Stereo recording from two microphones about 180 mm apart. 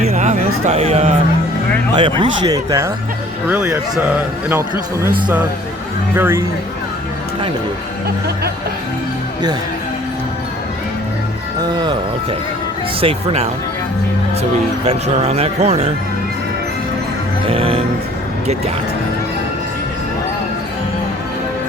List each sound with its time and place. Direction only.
0.0 s a sound: 40° right (ahead or behind)
2.0 s speech: 25° right (ahead or behind); by 4.6 s 10° right (ahead or behind)
6.1 s speech: 10° right (ahead or behind)
11.6 s speech: 25° right (ahead or behind)
13.0 s speech: 35° right (ahead or behind)
14.8 s speech: 35° right (ahead or behind)
17.5 s speech: 35° right (ahead or behind)